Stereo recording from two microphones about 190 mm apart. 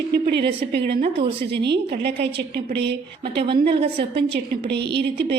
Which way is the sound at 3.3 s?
25° right (ahead or behind).